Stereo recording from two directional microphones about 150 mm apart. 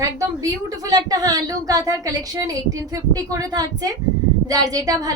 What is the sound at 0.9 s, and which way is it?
A woman's voice, 25° right (ahead or behind).